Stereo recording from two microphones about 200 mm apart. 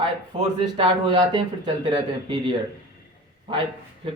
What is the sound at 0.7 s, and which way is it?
Speech, 25° right (ahead or behind).